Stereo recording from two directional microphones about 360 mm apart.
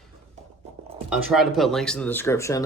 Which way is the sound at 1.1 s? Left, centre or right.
Centre.